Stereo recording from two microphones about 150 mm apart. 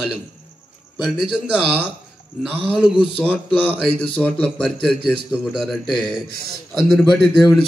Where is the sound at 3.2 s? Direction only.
10° left (ahead or behind).